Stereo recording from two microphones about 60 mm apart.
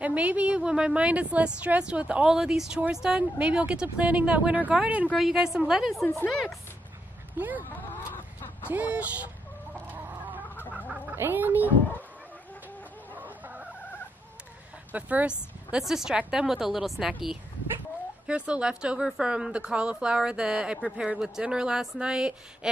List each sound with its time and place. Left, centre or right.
0.0 s a woman's voice: right
2.3 s speech: centre
3.2 s a woman's voice: centre
5.3 s speech: centre
7.3 s speech: right
8.6 s a woman's voice: right
9.8 s chicken: right
10.5 s chicken: left
11.1 s speech: right
13.1 s chicken: right
14.9 s speech: right
15.8 s a woman's voice: centre
18.2 s speech: centre